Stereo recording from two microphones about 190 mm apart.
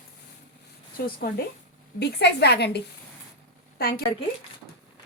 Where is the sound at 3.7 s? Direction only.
50° left (ahead or behind).